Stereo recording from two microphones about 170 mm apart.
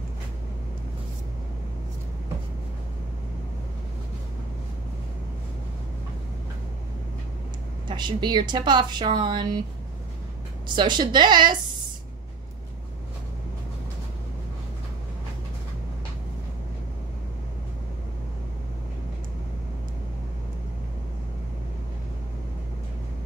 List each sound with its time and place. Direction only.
7.9 s speech: 25° right (ahead or behind)
10.8 s speech: 25° right (ahead or behind)